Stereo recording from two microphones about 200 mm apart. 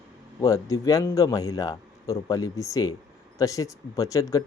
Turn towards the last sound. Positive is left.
turn(degrees=15)  # may be behind; listen again after turning